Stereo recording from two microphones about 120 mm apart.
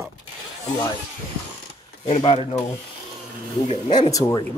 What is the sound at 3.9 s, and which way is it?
Speech, 30° left (ahead or behind).